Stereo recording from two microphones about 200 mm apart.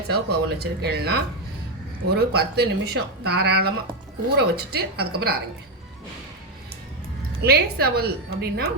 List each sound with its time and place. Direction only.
0.1 s speech: 55° right (ahead or behind)
7.4 s speech: 50° right (ahead or behind)